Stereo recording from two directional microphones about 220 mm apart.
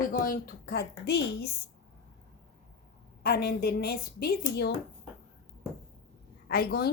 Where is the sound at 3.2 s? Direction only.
45° left (ahead or behind).